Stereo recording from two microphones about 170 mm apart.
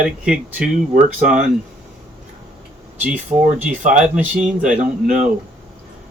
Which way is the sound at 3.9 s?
5° right (ahead or behind).